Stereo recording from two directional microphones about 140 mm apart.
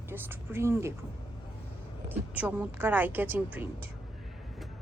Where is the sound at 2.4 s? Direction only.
10° right (ahead or behind).